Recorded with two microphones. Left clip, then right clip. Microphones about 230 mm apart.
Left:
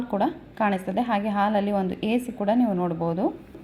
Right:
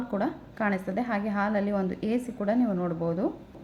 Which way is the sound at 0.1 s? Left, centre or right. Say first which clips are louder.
Left 6 dB; centre.